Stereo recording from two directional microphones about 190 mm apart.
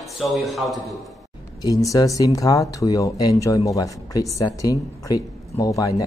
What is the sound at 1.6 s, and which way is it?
Speech, 15° left (ahead or behind).